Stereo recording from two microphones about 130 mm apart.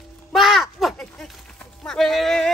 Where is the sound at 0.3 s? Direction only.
Centre (ahead or behind).